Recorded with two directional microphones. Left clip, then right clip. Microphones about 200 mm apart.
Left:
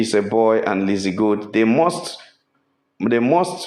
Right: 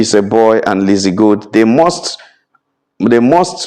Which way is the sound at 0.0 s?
45° right (ahead or behind).